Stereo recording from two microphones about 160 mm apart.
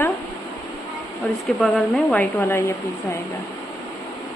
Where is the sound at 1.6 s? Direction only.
5° left (ahead or behind).